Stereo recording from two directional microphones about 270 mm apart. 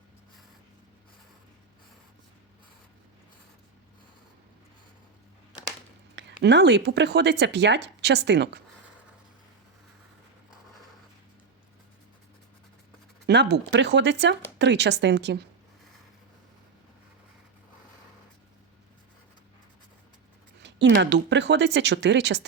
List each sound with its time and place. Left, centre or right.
6.1 s speech: right
13.2 s speech: right
20.6 s speech: right